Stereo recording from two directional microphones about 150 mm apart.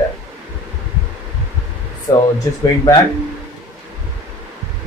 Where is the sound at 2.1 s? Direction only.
25° left (ahead or behind).